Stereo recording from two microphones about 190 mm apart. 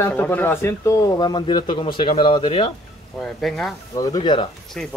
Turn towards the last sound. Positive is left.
turn(degrees=5)  # may be behind; listen again after turning